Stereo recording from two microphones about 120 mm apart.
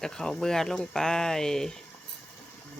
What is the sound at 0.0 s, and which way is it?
Cutlery, 5° left (ahead or behind).